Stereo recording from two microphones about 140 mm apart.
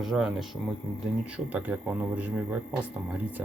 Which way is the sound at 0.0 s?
5° right (ahead or behind).